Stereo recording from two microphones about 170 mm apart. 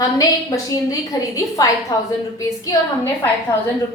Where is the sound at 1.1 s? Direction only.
20° left (ahead or behind).